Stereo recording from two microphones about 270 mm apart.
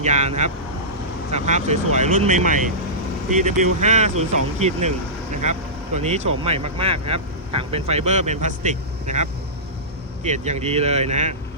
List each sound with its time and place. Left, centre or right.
0.0 s speech: right
10.2 s speech: right